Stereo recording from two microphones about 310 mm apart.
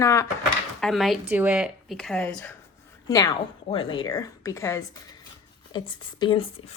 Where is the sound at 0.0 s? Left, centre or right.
Centre.